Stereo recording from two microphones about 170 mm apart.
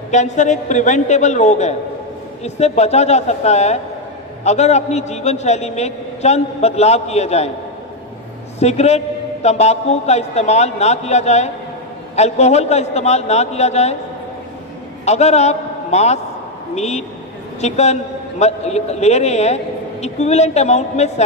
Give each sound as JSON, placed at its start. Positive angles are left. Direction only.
{"t": 0.1, "sound": "a man's voice", "side_deg": 45}
{"t": 8.5, "sound": "a man's voice", "side_deg": 40}
{"t": 15.0, "sound": "a man's voice", "side_deg": 40}